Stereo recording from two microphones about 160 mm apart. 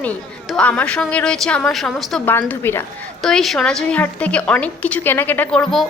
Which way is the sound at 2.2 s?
10° left (ahead or behind).